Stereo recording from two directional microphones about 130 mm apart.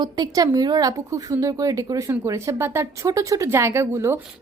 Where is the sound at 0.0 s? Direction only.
30° right (ahead or behind).